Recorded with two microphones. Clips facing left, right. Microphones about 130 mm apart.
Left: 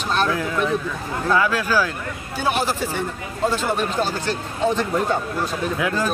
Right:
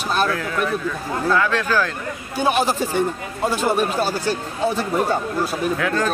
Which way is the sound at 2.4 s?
15° right (ahead or behind).